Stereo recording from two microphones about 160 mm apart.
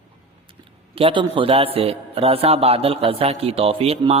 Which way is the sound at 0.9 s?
30° right (ahead or behind).